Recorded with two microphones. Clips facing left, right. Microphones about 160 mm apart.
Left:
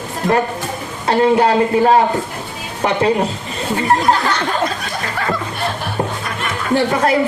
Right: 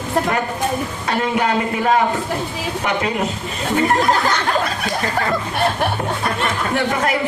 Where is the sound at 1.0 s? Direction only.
35° left (ahead or behind).